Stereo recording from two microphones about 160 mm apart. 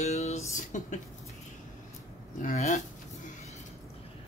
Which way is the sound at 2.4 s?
50° left (ahead or behind).